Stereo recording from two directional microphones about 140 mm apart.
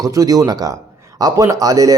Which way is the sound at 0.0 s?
25° right (ahead or behind).